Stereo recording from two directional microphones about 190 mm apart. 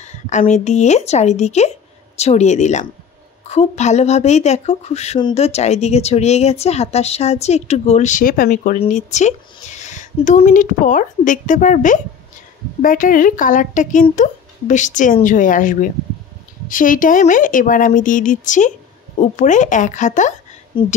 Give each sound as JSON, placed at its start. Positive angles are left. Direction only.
{"t": 0.0, "sound": "speech", "side_deg": 40}
{"t": 20.7, "sound": "speech", "side_deg": 30}